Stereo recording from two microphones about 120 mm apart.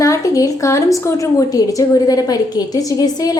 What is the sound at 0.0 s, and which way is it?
A woman's voice, 30° left (ahead or behind).